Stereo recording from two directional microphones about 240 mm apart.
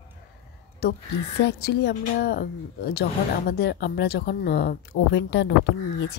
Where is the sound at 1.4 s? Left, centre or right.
Left.